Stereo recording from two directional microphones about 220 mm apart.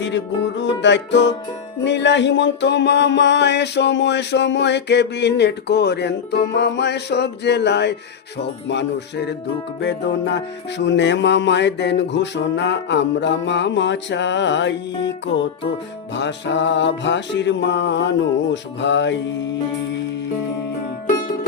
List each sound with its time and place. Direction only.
0.0 s music: 55° left (ahead or behind)
16.1 s music: 55° left (ahead or behind)